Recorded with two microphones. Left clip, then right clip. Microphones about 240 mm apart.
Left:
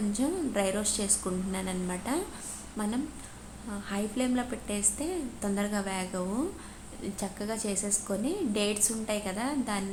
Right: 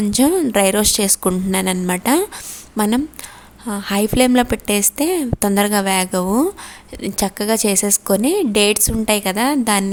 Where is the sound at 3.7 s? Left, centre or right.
Right.